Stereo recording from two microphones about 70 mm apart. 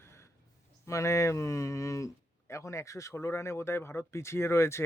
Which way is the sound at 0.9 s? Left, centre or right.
Left.